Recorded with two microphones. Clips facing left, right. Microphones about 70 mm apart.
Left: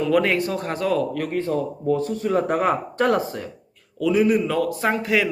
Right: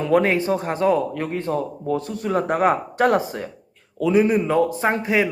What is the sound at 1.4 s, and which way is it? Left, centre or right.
Speech, right.